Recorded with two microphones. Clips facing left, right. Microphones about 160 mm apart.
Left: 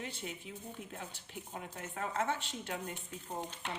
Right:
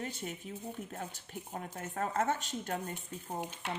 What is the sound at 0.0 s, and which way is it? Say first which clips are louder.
A woman's voice: right 3 dB; 45° right (ahead or behind).